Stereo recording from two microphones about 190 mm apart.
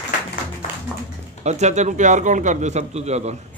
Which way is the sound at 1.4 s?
35° right (ahead or behind).